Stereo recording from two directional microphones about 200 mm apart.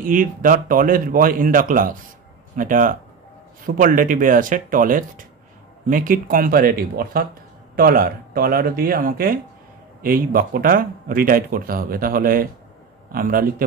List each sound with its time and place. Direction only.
0.0 s speech: 45° right (ahead or behind)